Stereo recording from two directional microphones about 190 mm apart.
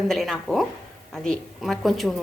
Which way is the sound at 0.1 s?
Centre (ahead or behind).